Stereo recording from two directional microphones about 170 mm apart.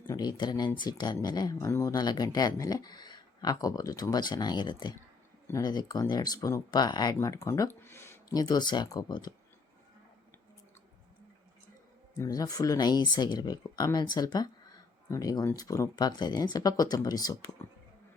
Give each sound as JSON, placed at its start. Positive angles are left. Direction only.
{"t": 0.1, "sound": "speech", "side_deg": 25}
{"t": 12.1, "sound": "speech", "side_deg": 20}